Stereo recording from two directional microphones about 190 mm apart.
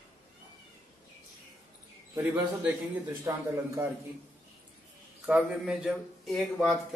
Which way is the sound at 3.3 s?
15° right (ahead or behind).